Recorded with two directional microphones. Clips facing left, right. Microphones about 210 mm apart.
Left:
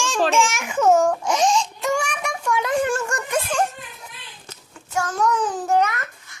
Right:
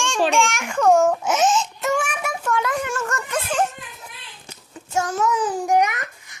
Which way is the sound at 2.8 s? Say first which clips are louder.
Left 5 dB; 30° left (ahead or behind).